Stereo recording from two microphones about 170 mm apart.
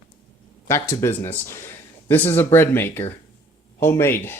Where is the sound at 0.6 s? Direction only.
15° left (ahead or behind).